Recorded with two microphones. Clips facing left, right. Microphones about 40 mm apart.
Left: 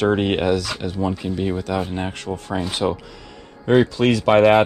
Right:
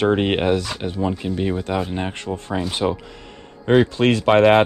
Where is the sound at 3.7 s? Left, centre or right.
Right.